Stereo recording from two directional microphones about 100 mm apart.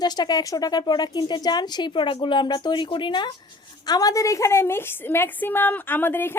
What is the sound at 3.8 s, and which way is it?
A woman's voice, 40° left (ahead or behind).